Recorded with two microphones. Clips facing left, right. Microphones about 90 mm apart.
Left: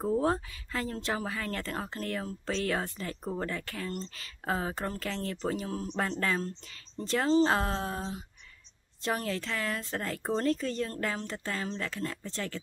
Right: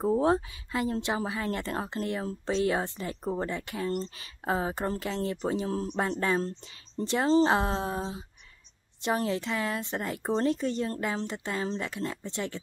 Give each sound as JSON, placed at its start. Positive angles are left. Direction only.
{"t": 0.0, "sound": "speech", "side_deg": -20}
{"t": 6.4, "sound": "speech", "side_deg": -35}
{"t": 7.1, "sound": "speech", "side_deg": -20}